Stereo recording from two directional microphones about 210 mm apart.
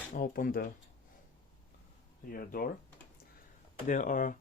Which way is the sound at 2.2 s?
45° left (ahead or behind).